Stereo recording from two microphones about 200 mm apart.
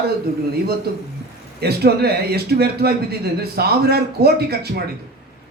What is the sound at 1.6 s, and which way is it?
A man's voice, 55° right (ahead or behind).